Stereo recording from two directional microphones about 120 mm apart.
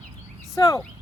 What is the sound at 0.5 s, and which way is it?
Speech, 25° left (ahead or behind).